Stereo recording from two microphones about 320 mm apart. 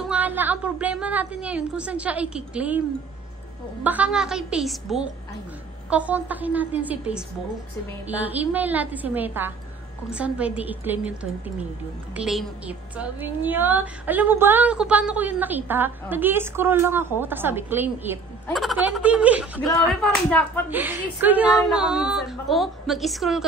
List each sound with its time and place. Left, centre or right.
0.1 s a woman's voice: centre
3.8 s a woman's voice: centre
8.1 s a woman's voice: centre